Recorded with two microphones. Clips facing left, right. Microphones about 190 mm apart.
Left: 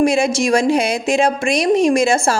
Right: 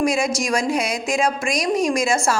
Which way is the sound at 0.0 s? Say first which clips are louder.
Left 5 dB; 30° left (ahead or behind).